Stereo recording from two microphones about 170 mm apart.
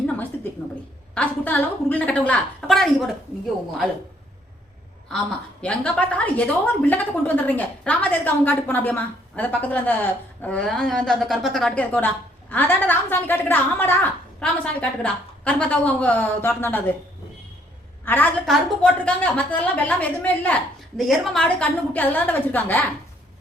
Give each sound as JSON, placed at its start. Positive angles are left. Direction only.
{"t": 1.1, "sound": "a woman's voice", "side_deg": 10}
{"t": 5.6, "sound": "a woman's voice", "side_deg": 5}
{"t": 18.0, "sound": "a woman's voice", "side_deg": 10}